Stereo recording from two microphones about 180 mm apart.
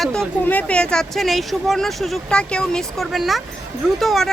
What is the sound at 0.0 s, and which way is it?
Speech, 5° left (ahead or behind).